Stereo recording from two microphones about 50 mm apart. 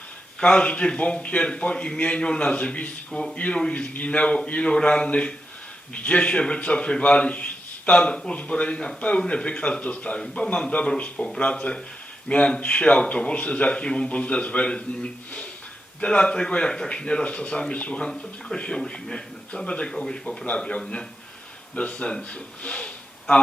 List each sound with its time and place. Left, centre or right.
0.3 s a man's voice: left
3.1 s speech: centre
3.3 s a man's voice: left